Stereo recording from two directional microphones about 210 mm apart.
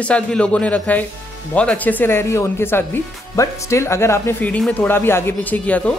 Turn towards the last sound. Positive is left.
turn(degrees=5)  # may be behind; listen again after turning